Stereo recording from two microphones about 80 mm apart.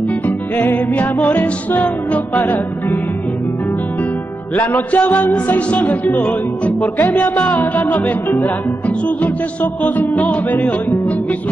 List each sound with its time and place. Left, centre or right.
0.6 s music: centre
4.6 s speech: centre
7.0 s music: left